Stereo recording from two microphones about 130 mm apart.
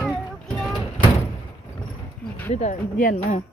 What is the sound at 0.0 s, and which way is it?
Vehicle, 5° left (ahead or behind).